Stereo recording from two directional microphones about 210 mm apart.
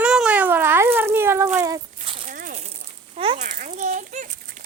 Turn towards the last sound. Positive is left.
turn(degrees=-35)  # may be behind; listen again after turning